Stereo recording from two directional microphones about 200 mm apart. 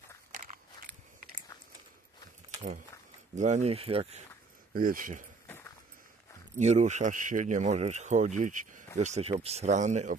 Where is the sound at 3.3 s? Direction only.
35° right (ahead or behind).